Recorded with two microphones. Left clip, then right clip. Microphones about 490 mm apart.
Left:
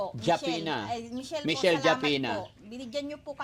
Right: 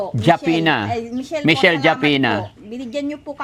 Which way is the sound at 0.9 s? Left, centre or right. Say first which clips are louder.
Right 11 dB; left.